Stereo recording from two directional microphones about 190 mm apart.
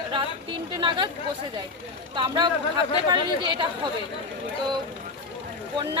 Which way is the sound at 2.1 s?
25° right (ahead or behind).